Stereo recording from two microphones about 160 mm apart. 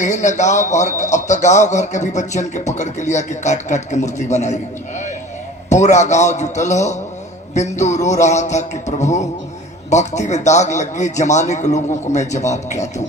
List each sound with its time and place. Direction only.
0.0 s a man's voice: 50° left (ahead or behind)